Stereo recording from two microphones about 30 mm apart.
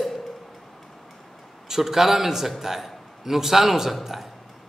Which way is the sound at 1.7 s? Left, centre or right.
Centre.